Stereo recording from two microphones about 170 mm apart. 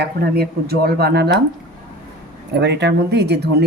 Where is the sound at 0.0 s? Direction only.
70° right (ahead or behind).